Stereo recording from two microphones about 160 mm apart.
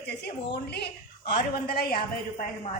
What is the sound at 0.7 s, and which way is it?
A woman's voice, 90° left.